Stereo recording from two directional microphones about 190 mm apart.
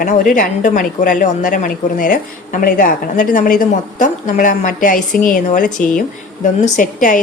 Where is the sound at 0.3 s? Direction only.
45° left (ahead or behind).